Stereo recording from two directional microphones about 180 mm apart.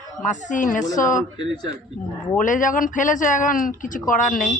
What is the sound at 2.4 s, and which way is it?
Speech, 45° left (ahead or behind).